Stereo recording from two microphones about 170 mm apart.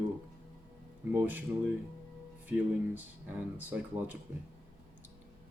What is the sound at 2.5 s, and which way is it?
Speech, 10° right (ahead or behind).